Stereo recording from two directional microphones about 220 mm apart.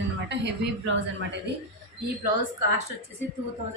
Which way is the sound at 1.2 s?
55° right (ahead or behind).